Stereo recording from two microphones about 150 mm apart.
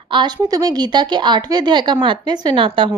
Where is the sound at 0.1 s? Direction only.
30° right (ahead or behind).